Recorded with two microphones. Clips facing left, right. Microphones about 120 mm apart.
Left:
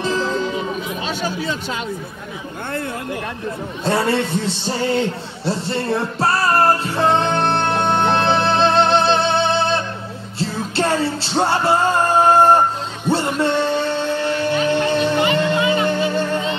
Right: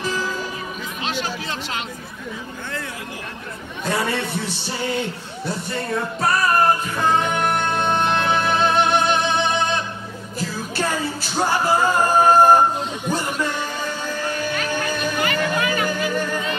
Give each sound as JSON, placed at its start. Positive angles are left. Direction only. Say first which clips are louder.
{"t": 0.0, "sound": "music", "louder": "left 5 dB", "side_deg": 25}
{"t": 3.8, "sound": "a man's voice", "louder": "left 4 dB", "side_deg": 20}
{"t": 4.5, "sound": "music", "louder": "left 5 dB", "side_deg": -15}
{"t": 5.4, "sound": "music", "louder": "left 5 dB", "side_deg": 30}